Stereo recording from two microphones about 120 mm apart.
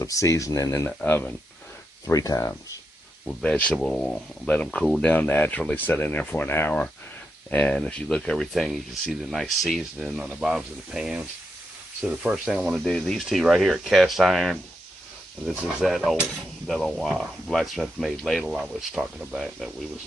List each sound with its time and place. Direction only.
0.0 s speech: 25° left (ahead or behind)
2.0 s speech: 30° left (ahead or behind)
3.2 s cutlery: 5° left (ahead or behind)
4.4 s speech: 10° left (ahead or behind)
7.5 s cutlery: 10° left (ahead or behind)
12.0 s speech: 10° right (ahead or behind)
12.9 s cutlery: centre (ahead or behind)